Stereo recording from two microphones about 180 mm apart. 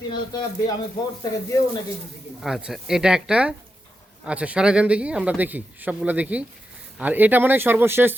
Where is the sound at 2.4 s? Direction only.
Centre (ahead or behind).